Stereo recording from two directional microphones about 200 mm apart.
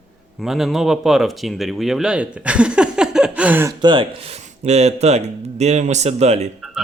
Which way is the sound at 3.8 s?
25° right (ahead or behind).